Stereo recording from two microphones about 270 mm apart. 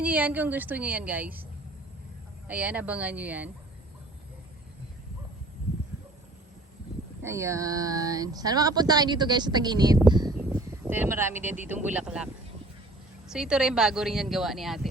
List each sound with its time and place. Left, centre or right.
0.0 s speech: centre
2.5 s speech: centre
7.2 s speech: centre
10.1 s a sound: centre
11.9 s speech: centre